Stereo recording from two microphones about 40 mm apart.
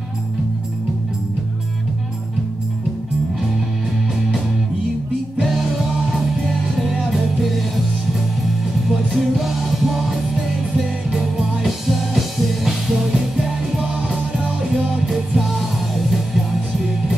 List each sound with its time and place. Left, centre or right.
5.4 s music: centre
8.8 s music: centre
13.8 s music: centre
14.9 s music: centre